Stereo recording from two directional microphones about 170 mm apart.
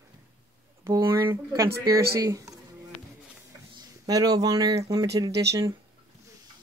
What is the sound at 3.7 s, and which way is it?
Speech, 20° right (ahead or behind).